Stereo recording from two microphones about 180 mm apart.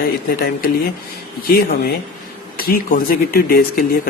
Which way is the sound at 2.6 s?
55° left (ahead or behind).